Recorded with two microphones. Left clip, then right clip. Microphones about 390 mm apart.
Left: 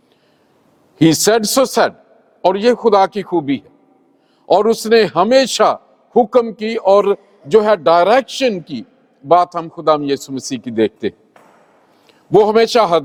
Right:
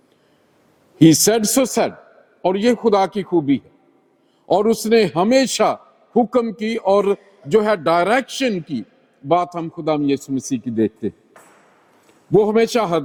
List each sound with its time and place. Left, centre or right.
0.9 s a man's voice: left
12.4 s a man's voice: left